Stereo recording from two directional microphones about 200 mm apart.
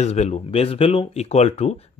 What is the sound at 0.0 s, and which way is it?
Speech, 35° left (ahead or behind).